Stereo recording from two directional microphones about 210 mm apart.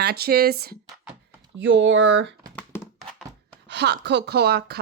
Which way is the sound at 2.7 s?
10° left (ahead or behind).